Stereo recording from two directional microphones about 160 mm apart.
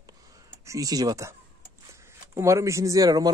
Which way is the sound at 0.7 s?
20° right (ahead or behind).